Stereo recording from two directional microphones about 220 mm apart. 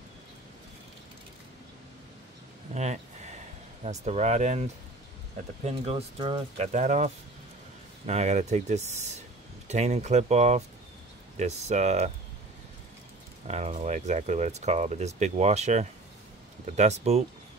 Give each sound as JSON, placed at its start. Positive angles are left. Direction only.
{"t": 2.7, "sound": "speech", "side_deg": -30}
{"t": 5.7, "sound": "speech", "side_deg": -25}
{"t": 8.1, "sound": "speech", "side_deg": -30}
{"t": 13.5, "sound": "speech", "side_deg": -30}